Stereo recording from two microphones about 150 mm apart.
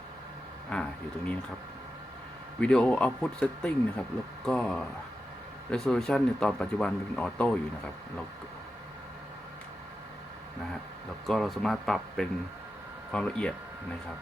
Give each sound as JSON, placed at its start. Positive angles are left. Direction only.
{"t": 0.7, "sound": "speech", "side_deg": 10}
{"t": 2.6, "sound": "speech", "side_deg": 5}
{"t": 11.3, "sound": "speech", "side_deg": 0}